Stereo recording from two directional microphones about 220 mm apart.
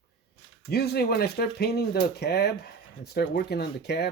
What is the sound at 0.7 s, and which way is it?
Speech, 45° left (ahead or behind).